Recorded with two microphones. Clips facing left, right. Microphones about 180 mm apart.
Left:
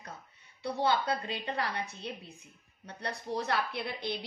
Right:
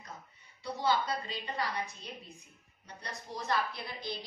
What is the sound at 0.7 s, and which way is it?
Speech, 60° left (ahead or behind).